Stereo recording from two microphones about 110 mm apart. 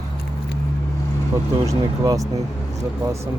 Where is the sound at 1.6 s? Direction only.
30° right (ahead or behind).